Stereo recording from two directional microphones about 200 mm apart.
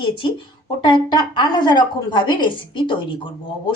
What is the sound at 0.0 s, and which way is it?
A woman's voice, 25° left (ahead or behind).